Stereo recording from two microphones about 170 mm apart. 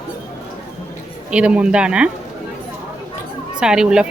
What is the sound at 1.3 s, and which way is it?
Speech, 5° right (ahead or behind).